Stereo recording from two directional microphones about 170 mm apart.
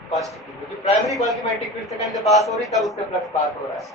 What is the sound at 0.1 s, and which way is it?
A man's voice, centre (ahead or behind).